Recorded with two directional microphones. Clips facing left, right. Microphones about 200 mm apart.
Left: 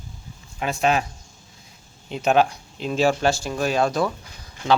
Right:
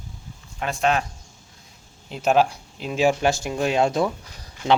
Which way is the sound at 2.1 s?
5° right (ahead or behind).